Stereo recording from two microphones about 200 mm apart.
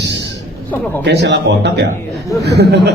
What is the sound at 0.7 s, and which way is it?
Speech, 10° left (ahead or behind).